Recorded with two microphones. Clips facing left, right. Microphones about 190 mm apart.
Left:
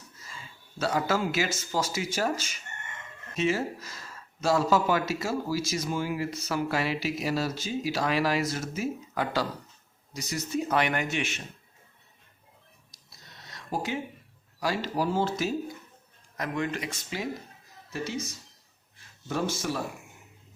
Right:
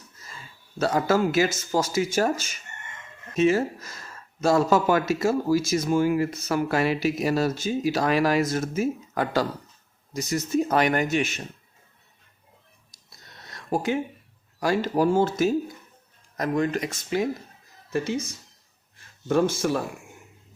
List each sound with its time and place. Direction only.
0.8 s speech: 45° right (ahead or behind)
13.1 s a sound: 50° right (ahead or behind)
14.6 s speech: 50° right (ahead or behind)
19.3 s speech: 55° right (ahead or behind)